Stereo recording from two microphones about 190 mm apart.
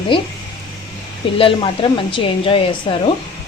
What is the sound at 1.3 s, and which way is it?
A woman's voice, 30° left (ahead or behind).